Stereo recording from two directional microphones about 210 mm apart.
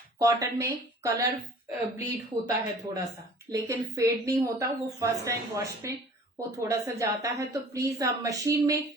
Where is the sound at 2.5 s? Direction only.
15° right (ahead or behind).